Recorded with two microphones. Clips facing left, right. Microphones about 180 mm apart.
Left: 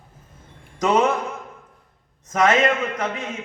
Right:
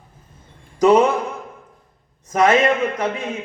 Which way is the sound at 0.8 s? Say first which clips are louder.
Right 5 dB; 30° right (ahead or behind).